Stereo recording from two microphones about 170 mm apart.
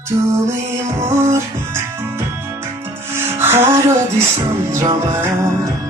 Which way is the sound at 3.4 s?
15° right (ahead or behind).